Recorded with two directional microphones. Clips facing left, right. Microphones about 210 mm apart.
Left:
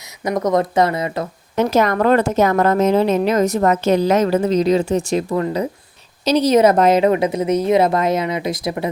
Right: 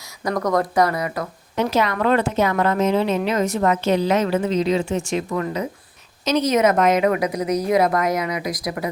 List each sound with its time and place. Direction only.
0.3 s a woman's voice: 20° left (ahead or behind)
1.5 s a woman's voice: 45° left (ahead or behind); by 8.9 s 25° left (ahead or behind)